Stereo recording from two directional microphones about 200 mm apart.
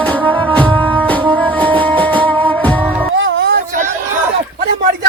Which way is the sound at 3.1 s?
65° right (ahead or behind).